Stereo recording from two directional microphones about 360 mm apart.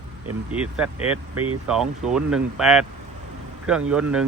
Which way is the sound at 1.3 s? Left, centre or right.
Right.